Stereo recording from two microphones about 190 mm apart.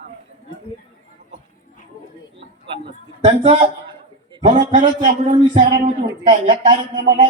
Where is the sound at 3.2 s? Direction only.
30° right (ahead or behind).